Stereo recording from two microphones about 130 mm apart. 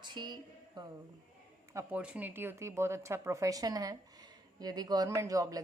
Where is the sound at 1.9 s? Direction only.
10° right (ahead or behind); by 5.6 s 25° right (ahead or behind).